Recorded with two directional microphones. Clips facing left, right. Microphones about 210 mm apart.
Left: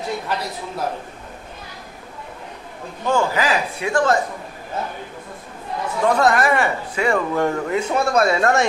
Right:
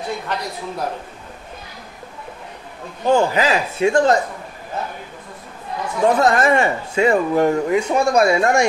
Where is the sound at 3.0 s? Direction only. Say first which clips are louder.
Right 4 dB; 20° right (ahead or behind).